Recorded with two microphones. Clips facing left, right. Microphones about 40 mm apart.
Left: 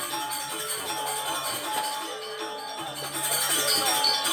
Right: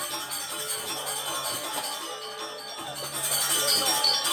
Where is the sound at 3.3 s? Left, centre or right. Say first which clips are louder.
Even; left.